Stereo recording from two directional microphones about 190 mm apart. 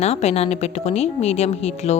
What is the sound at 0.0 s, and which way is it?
Speech, 35° left (ahead or behind).